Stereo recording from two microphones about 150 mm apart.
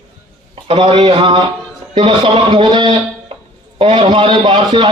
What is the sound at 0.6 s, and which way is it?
A man's voice, 40° right (ahead or behind).